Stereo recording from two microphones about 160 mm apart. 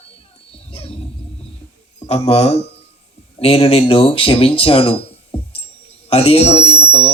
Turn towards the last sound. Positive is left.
turn(degrees=40)  # may be behind; listen again after turning